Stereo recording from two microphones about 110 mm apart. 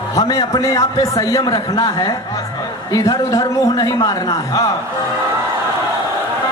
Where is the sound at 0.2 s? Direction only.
35° left (ahead or behind).